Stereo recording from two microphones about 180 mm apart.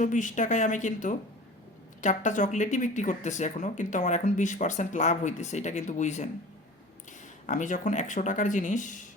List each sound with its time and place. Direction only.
0.0 s speech: 45° left (ahead or behind)
7.4 s speech: 45° left (ahead or behind)